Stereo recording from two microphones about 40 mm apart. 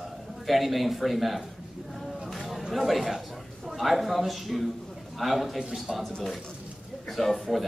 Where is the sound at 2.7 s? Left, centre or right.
Centre.